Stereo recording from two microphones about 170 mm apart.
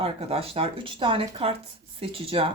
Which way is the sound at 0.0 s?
35° right (ahead or behind).